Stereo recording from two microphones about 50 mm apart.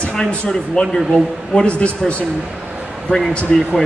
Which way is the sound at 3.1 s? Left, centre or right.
Right.